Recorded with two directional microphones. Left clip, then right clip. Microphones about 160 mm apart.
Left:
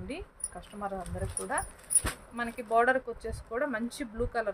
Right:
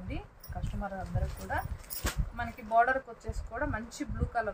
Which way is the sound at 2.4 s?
90° left.